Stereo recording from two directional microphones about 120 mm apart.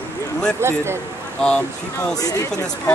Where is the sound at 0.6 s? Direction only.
20° right (ahead or behind).